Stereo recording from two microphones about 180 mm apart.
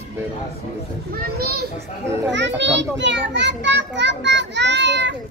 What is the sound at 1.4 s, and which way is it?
Speech, 60° right (ahead or behind).